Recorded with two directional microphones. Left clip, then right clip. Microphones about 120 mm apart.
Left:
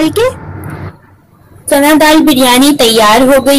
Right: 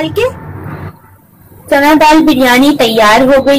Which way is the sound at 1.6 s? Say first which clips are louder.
Even; 20° left (ahead or behind).